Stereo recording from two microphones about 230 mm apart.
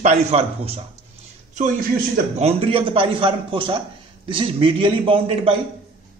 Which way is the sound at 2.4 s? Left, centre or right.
Right.